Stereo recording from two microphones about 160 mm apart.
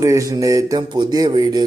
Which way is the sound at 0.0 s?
20° right (ahead or behind).